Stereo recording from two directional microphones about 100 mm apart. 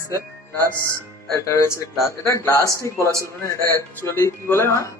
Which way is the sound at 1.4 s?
30° left (ahead or behind).